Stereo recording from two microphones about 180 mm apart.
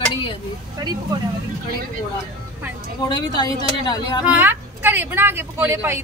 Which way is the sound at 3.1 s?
25° left (ahead or behind).